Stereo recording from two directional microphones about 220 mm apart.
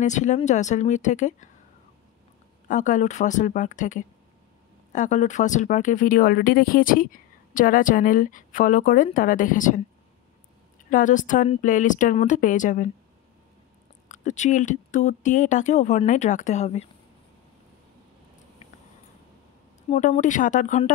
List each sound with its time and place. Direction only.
0.0 s speech: 35° left (ahead or behind)
2.7 s speech: 35° left (ahead or behind)
10.9 s speech: 35° left (ahead or behind)
14.0 s speech: 35° left (ahead or behind)
19.9 s speech: 35° left (ahead or behind)